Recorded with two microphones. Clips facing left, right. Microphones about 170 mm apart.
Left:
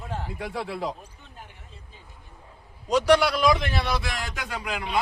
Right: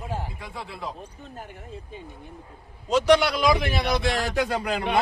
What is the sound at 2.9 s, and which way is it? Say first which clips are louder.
Speech: right 1 dB; 10° left (ahead or behind).